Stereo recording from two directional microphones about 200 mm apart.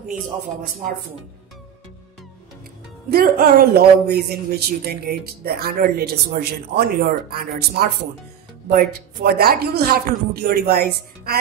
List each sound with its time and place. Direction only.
3.1 s speech: 50° right (ahead or behind)